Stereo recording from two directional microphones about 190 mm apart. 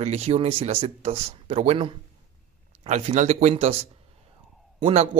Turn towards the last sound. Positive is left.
turn(degrees=-35)  # may be behind; listen again after turning